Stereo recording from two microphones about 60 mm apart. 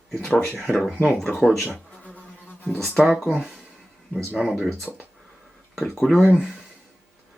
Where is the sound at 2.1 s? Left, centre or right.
Left.